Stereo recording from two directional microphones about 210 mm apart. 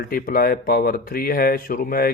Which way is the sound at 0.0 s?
45° left (ahead or behind).